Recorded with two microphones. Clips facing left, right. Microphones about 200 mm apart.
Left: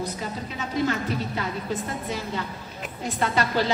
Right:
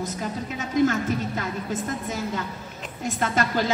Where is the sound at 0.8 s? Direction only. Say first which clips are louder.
Right 3 dB; 45° right (ahead or behind).